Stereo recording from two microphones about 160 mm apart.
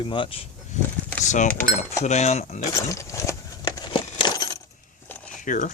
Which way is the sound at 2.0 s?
45° left (ahead or behind).